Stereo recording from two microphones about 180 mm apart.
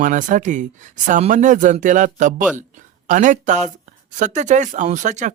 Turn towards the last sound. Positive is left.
turn(degrees=-40)  # may be behind; listen again after turning